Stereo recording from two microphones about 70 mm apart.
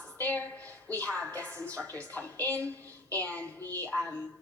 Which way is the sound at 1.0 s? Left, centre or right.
Left.